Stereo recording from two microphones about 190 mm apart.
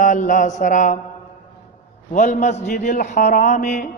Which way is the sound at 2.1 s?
40° left (ahead or behind).